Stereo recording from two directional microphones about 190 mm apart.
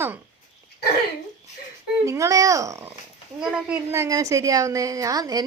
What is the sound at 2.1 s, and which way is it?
A woman's voice, 15° right (ahead or behind).